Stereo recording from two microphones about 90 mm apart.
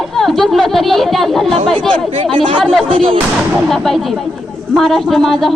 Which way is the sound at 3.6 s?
Centre (ahead or behind).